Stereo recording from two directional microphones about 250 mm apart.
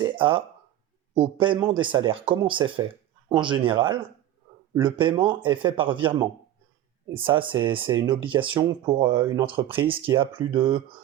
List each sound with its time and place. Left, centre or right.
0.0 s speech: right
7.3 s speech: centre